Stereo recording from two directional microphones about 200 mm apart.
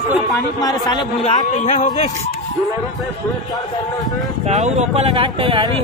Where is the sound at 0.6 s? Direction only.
20° left (ahead or behind).